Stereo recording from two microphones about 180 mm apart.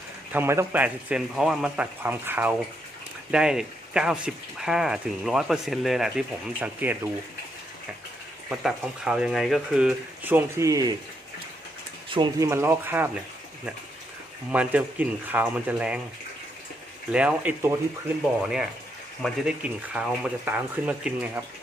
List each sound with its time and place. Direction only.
0.3 s speech: 10° right (ahead or behind)
8.4 s speech: 5° right (ahead or behind)
12.1 s speech: 20° right (ahead or behind)
14.5 s speech: 5° right (ahead or behind)
17.1 s speech: 5° right (ahead or behind)